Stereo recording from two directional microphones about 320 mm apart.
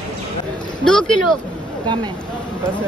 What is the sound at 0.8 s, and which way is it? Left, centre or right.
Speech, centre.